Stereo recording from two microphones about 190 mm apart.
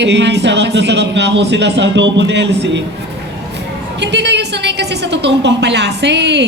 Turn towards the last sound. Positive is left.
turn(degrees=-65)  # may be behind; listen again after turning